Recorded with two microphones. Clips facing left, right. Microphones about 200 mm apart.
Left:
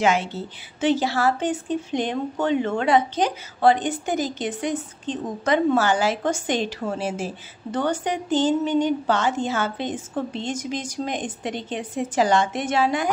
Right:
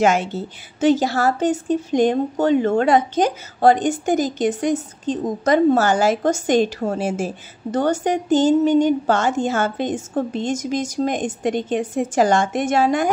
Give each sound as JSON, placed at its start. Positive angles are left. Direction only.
{"t": 0.0, "sound": "a woman's voice", "side_deg": -45}